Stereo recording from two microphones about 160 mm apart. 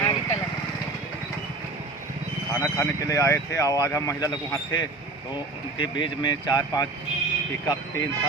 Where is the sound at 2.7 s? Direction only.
20° left (ahead or behind).